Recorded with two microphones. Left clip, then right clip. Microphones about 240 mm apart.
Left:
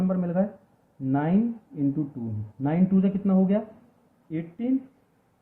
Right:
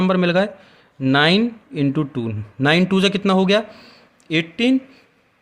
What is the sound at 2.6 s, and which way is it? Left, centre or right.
Speech, right.